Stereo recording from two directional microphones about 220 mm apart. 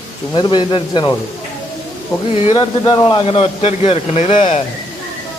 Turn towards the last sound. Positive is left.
turn(degrees=30)  # may be behind; listen again after turning